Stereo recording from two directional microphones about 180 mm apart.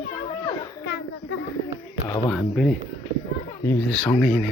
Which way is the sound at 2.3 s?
Centre (ahead or behind).